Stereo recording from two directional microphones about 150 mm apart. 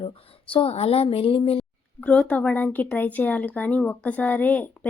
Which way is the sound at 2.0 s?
10° left (ahead or behind).